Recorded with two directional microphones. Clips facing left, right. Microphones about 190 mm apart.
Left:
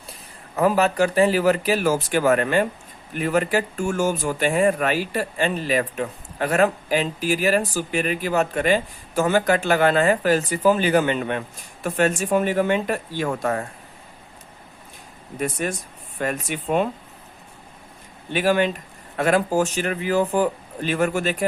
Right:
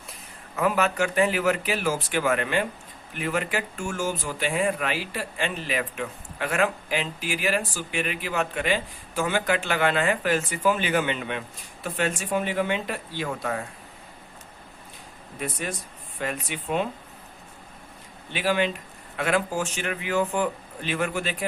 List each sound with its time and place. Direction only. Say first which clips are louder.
0.5 s speech: left 5 dB; 35° left (ahead or behind)
15.6 s speech: left 6 dB; 50° left (ahead or behind)
18.3 s speech: left 5 dB; 50° left (ahead or behind)